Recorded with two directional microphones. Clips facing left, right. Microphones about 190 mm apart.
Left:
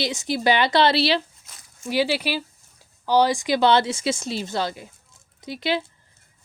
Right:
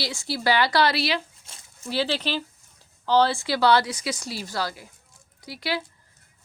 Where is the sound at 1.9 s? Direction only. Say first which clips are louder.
Left 3 dB; 10° left (ahead or behind).